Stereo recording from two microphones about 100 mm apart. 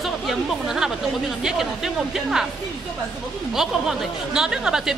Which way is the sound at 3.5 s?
5° right (ahead or behind).